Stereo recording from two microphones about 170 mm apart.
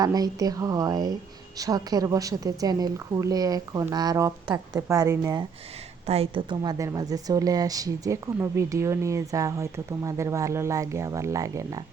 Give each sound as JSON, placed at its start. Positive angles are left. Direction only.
{"t": 0.0, "sound": "a woman's voice", "side_deg": -20}
{"t": 6.1, "sound": "a woman's voice", "side_deg": -35}